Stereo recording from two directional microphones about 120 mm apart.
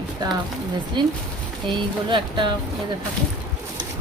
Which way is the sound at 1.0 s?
40° right (ahead or behind).